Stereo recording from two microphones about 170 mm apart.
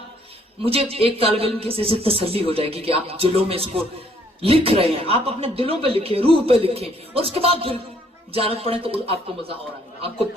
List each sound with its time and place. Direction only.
0.6 s a man's voice: 35° right (ahead or behind)